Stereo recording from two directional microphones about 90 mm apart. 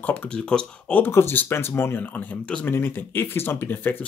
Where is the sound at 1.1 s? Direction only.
25° left (ahead or behind).